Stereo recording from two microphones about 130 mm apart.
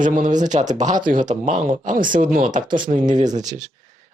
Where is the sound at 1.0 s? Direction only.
80° right.